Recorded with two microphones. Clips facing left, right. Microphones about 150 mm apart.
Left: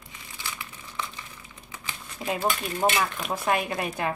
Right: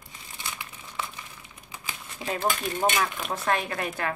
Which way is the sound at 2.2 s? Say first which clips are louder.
Left 1 dB; 10° left (ahead or behind).